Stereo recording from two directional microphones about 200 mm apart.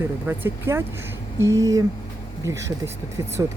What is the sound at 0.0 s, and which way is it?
Speech, 10° right (ahead or behind).